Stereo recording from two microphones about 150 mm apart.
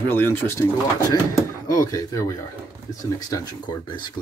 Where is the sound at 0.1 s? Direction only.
15° left (ahead or behind).